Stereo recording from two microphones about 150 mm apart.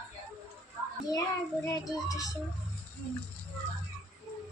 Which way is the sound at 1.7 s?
20° left (ahead or behind).